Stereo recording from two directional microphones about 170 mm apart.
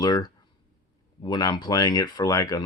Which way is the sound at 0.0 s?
25° left (ahead or behind).